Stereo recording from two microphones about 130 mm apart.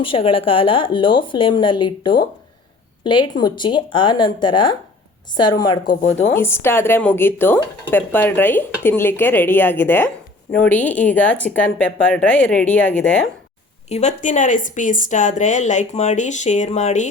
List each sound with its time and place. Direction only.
0.0 s speech: 45° left (ahead or behind)
6.2 s a woman's voice: 20° left (ahead or behind)
13.9 s speech: 65° left (ahead or behind)